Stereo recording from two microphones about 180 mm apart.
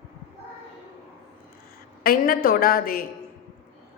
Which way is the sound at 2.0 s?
55° left (ahead or behind).